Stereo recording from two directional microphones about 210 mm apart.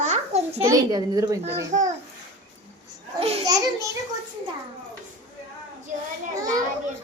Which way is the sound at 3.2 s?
30° right (ahead or behind).